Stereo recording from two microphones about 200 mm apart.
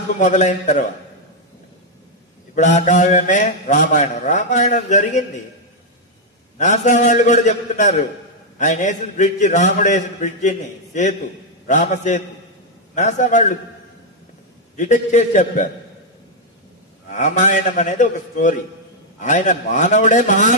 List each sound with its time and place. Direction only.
0.2 s a man's voice: 40° left (ahead or behind)
2.5 s a man's voice: 35° left (ahead or behind)
6.6 s a man's voice: 35° left (ahead or behind)
14.8 s a man's voice: 40° left (ahead or behind)
17.1 s a man's voice: 40° left (ahead or behind)